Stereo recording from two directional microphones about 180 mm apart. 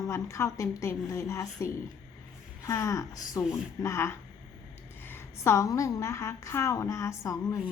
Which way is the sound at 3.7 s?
15° left (ahead or behind).